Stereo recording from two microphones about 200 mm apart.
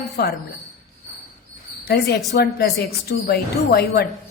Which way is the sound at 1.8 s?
55° left (ahead or behind).